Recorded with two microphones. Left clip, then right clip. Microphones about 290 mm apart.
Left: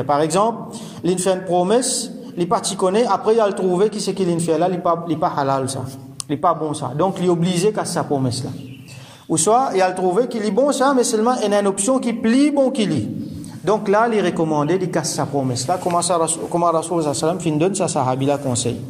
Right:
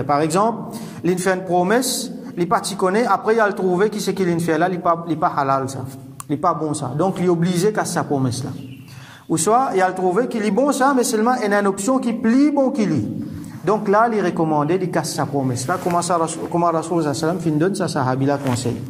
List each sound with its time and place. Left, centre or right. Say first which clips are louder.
0.0 s a man's voice: left 1 dB; centre